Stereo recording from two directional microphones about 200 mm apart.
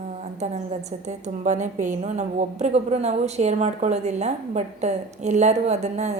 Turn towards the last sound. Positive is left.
turn(degrees=-35)  # may be behind; listen again after turning